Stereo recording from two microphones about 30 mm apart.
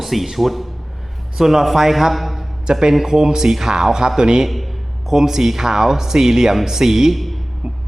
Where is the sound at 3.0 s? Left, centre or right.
Centre.